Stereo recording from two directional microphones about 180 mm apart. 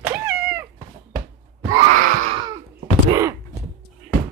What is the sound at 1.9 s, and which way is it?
Baby cry, 45° right (ahead or behind).